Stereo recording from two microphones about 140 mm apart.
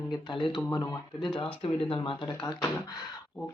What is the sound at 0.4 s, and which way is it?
Speech, 30° left (ahead or behind).